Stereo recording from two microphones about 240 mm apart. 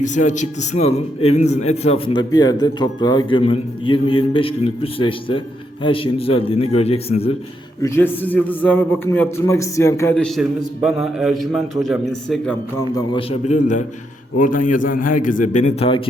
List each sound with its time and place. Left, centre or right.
0.0 s a man's voice: left
7.8 s a man's voice: centre
13.1 s a man's voice: left